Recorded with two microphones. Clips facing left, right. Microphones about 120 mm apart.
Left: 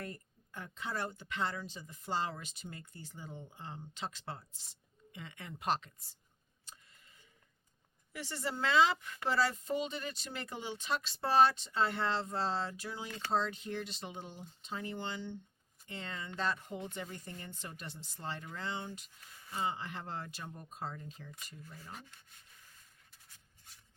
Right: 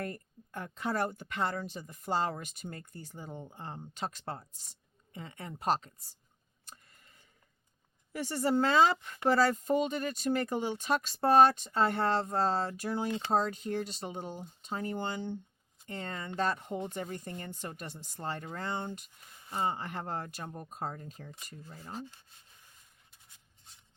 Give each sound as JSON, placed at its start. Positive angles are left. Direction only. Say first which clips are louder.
{"t": 0.0, "sound": "speech", "louder": "right 6 dB", "side_deg": -50}
{"t": 6.7, "sound": "tick", "louder": "right 3 dB", "side_deg": -50}
{"t": 8.1, "sound": "speech", "louder": "right 10 dB", "side_deg": -45}
{"t": 13.1, "sound": "speech", "louder": "right 9 dB", "side_deg": -25}
{"t": 13.3, "sound": "speech", "louder": "right 3 dB", "side_deg": -45}
{"t": 21.9, "sound": "rub", "louder": "right 9 dB", "side_deg": -30}